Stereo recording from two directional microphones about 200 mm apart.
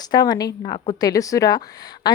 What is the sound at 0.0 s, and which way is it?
A woman's voice, 20° left (ahead or behind).